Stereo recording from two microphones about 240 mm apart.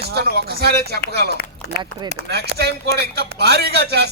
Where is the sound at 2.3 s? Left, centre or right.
Right.